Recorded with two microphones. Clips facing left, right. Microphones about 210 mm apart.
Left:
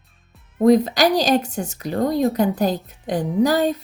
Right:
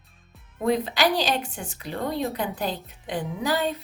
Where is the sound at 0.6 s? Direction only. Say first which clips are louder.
Left 8 dB; 40° left (ahead or behind).